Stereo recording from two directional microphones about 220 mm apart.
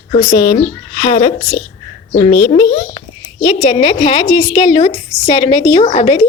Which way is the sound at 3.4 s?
25° left (ahead or behind).